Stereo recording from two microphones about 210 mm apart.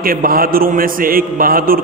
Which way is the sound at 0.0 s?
45° right (ahead or behind).